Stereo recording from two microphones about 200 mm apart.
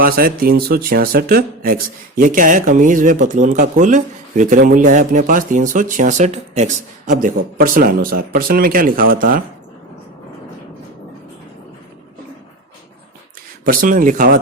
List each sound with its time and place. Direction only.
0.0 s speech: 45° right (ahead or behind)
13.7 s speech: 40° right (ahead or behind)